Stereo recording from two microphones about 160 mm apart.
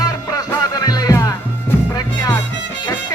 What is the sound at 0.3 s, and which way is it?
Music, 25° left (ahead or behind).